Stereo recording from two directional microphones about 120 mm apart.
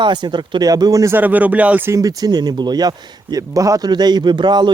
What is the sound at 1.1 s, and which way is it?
Speech, 15° right (ahead or behind).